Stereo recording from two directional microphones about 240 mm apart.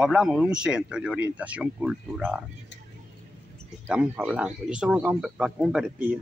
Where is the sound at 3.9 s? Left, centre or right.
Centre.